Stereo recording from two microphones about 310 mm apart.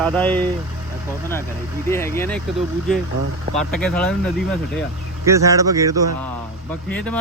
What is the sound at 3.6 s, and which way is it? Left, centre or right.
Speech, centre.